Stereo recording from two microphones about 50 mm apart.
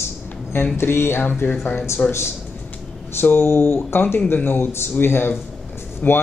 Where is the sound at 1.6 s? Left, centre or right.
Left.